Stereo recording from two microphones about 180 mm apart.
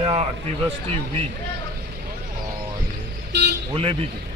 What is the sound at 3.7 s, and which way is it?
Speech, 30° right (ahead or behind).